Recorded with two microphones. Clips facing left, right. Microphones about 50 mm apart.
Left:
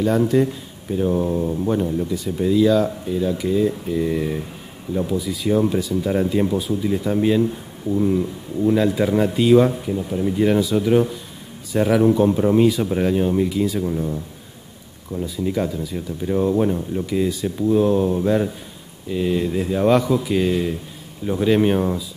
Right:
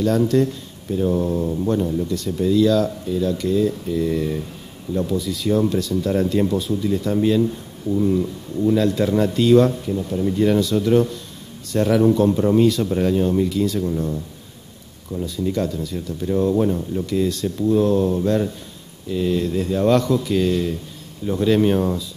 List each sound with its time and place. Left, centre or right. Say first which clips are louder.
0.3 s speech: even; centre
15.2 s speech: even; centre